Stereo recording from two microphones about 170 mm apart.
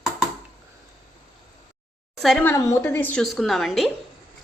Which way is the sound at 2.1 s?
Centre (ahead or behind).